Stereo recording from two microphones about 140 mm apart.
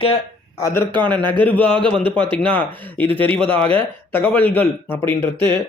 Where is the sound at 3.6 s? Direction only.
10° left (ahead or behind).